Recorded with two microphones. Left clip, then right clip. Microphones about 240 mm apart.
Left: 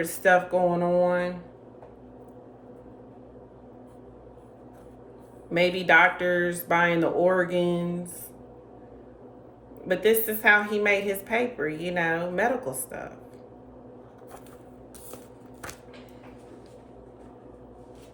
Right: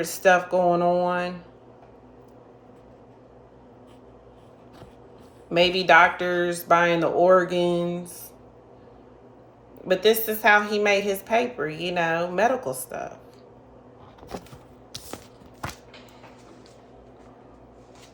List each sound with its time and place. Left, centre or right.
0.0 s speech: centre
5.5 s speech: centre
9.8 s speech: right